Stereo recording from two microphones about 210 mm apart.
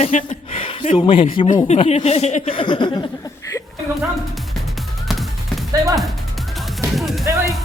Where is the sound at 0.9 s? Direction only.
25° left (ahead or behind).